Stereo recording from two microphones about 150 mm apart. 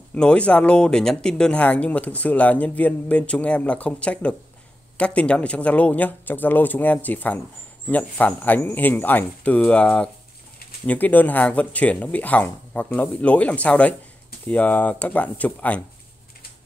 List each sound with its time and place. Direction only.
0.1 s speech: 5° left (ahead or behind)